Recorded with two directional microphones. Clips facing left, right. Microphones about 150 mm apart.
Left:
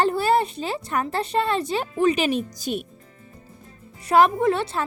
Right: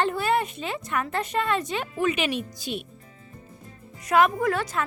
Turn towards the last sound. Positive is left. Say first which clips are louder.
# left 4 dB
turn(degrees=25)  # may be behind; listen again after turning